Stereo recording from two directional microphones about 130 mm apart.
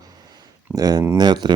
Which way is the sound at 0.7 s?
30° right (ahead or behind).